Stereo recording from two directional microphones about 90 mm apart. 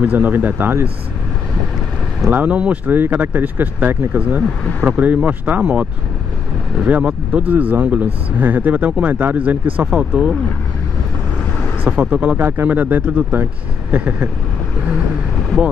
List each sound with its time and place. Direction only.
0.0 s speech: 20° right (ahead or behind)
2.3 s speech: 15° right (ahead or behind)
11.8 s speech: 15° right (ahead or behind)